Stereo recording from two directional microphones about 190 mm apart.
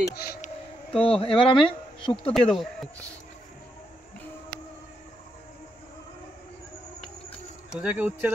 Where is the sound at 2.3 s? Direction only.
Centre (ahead or behind).